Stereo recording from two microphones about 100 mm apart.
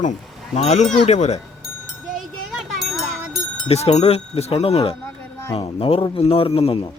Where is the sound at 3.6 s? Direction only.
90° left.